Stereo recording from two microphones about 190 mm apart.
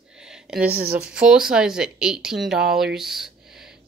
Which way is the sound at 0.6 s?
55° right (ahead or behind).